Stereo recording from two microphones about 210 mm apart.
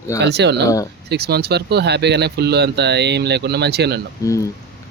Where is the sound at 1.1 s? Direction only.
50° right (ahead or behind).